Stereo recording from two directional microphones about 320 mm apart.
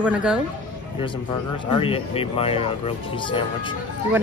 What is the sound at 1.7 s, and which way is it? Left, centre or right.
Speech, centre.